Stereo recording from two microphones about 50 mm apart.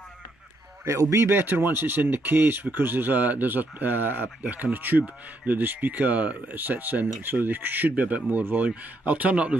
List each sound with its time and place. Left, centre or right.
0.8 s speech: right